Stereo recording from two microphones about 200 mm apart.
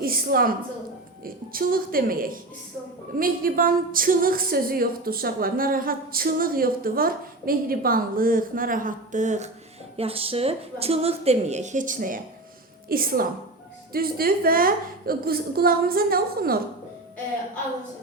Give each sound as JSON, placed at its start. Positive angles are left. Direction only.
{"t": 0.0, "sound": "a woman's voice", "side_deg": -45}